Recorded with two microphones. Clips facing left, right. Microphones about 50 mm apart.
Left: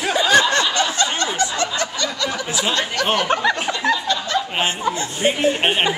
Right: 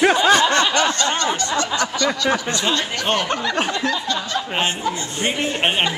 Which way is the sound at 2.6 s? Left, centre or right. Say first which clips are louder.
Left 1 dB; centre.